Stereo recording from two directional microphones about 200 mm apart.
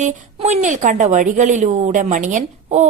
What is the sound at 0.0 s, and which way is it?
A woman's voice, 35° right (ahead or behind).